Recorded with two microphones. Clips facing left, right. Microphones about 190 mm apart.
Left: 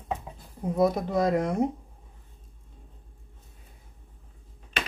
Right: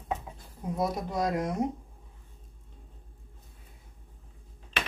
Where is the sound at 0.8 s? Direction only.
55° left (ahead or behind).